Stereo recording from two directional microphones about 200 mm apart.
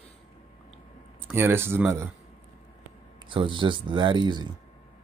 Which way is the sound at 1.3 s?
10° right (ahead or behind).